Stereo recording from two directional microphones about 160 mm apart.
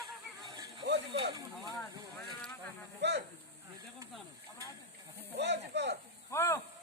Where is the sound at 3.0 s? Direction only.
90° right.